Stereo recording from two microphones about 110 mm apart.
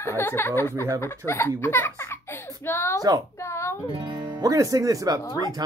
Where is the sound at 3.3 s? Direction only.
25° left (ahead or behind).